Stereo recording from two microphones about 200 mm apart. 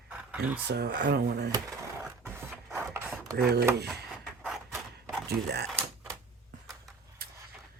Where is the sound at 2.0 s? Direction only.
10° right (ahead or behind).